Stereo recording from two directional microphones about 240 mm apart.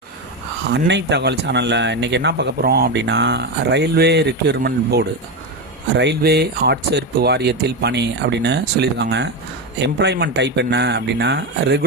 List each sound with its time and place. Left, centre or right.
0.7 s speech: right